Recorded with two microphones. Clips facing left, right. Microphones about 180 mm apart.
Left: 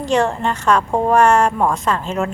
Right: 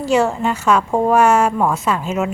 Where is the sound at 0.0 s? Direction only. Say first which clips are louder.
Right 1 dB; 5° right (ahead or behind).